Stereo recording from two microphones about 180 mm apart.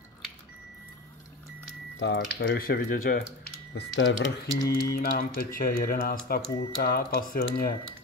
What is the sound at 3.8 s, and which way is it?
Speech, 90° left.